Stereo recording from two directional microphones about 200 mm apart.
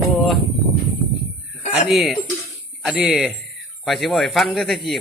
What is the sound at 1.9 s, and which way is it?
Speech, centre (ahead or behind).